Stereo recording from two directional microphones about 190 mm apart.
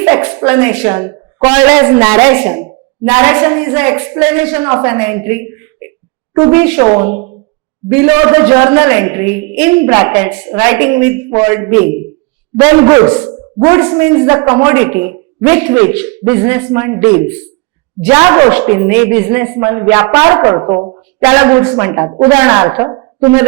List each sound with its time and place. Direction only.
0.0 s a woman's voice: 15° right (ahead or behind)
6.5 s a man's voice: 10° right (ahead or behind)
6.8 s a woman's voice: 25° right (ahead or behind)
7.9 s a man's voice: 15° right (ahead or behind)
22.1 s a woman's voice: 25° right (ahead or behind)